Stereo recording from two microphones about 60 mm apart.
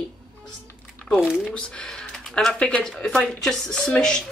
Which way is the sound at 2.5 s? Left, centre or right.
Left.